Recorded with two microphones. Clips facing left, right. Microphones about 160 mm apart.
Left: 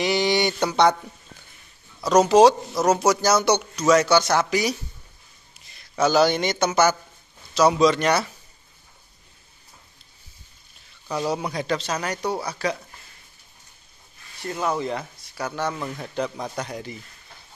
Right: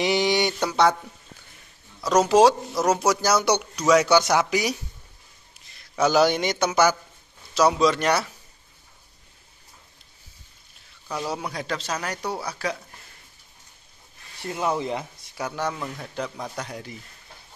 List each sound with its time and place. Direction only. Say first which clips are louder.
0.0 s a sound: even; 15° right (ahead or behind)
0.7 s speech: left 2 dB; 5° right (ahead or behind)
2.2 s speech: left 1 dB; 5° right (ahead or behind)
2.8 s speech: left 2 dB; 10° left (ahead or behind)
3.2 s speech: left 2 dB; 10° right (ahead or behind)
6.0 s speech: left 1 dB; 15° right (ahead or behind)
11.2 s speech: left 5 dB; centre (ahead or behind)
14.5 s speech: even; 15° right (ahead or behind)